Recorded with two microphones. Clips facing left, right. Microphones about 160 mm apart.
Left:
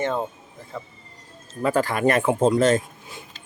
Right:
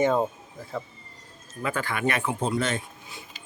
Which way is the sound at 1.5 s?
35° left (ahead or behind).